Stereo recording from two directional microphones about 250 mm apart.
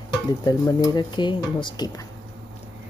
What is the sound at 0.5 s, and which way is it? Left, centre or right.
Speech, centre.